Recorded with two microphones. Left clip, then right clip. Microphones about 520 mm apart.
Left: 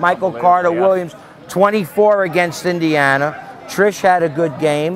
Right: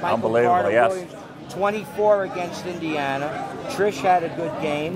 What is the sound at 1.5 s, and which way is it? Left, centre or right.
A man's voice, left.